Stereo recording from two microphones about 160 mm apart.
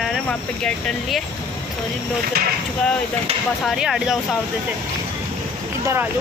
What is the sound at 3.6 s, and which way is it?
Speech, centre (ahead or behind).